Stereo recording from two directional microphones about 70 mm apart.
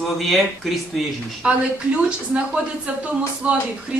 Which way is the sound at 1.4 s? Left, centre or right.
Centre.